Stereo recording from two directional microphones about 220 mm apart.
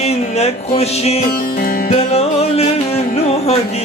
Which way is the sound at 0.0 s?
30° left (ahead or behind).